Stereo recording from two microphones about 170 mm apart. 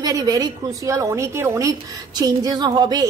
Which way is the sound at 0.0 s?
20° right (ahead or behind).